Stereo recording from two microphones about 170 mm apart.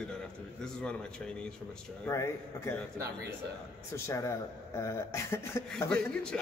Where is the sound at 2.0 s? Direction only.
15° left (ahead or behind).